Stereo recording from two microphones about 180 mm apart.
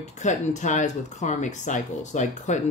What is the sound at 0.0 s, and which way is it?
Speech, 40° left (ahead or behind).